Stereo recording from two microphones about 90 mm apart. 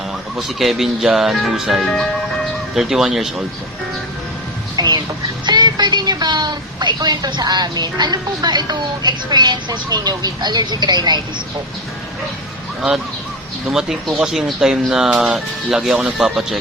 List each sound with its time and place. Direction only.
0.3 s speech: 5° right (ahead or behind)
4.8 s chicken: 45° right (ahead or behind)
5.5 s a woman's voice: 55° right (ahead or behind)
13.7 s speech: 5° right (ahead or behind)